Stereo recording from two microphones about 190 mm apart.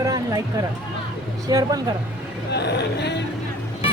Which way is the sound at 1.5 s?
20° right (ahead or behind).